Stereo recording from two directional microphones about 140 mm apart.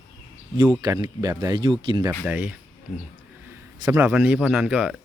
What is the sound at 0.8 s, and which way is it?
Speech, 25° right (ahead or behind).